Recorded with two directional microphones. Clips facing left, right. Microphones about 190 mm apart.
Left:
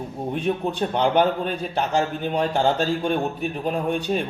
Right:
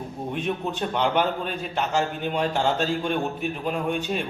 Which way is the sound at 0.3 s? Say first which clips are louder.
Left 4 dB; 35° left (ahead or behind).